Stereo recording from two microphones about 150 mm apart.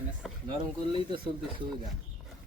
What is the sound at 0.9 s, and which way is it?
Speech, 35° right (ahead or behind).